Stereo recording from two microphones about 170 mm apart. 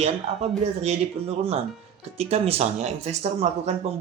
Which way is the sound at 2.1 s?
40° right (ahead or behind).